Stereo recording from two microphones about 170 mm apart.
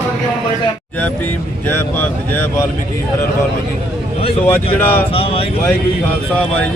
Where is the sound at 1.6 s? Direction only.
10° left (ahead or behind).